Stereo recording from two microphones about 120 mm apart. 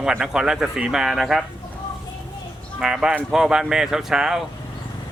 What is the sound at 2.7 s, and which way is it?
Speech, 5° right (ahead or behind).